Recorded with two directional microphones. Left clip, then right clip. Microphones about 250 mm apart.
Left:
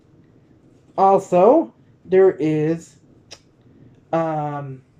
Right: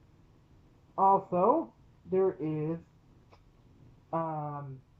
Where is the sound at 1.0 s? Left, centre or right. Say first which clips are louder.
Left 11 dB; left.